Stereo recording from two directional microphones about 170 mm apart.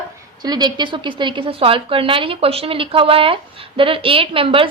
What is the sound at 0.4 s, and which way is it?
A woman's voice, 25° right (ahead or behind).